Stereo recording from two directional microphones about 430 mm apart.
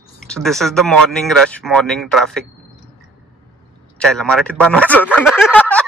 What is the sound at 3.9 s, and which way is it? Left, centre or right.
Speech, centre.